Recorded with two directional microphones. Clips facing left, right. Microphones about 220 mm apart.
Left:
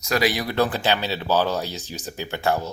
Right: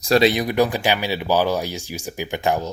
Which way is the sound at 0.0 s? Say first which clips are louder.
Right 6 dB; 30° right (ahead or behind).